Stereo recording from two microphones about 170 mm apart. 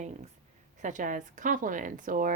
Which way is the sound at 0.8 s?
45° right (ahead or behind).